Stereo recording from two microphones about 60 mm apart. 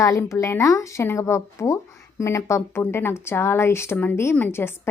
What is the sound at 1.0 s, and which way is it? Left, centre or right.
A woman's voice, left.